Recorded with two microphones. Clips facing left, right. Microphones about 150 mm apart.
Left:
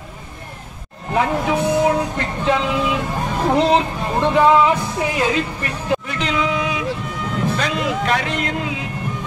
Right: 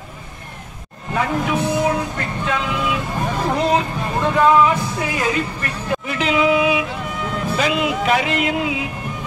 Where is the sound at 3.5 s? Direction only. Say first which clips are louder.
Left 4 dB; 25° left (ahead or behind).